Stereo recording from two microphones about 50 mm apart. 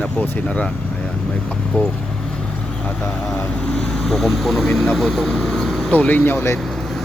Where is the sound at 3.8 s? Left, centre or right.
Centre.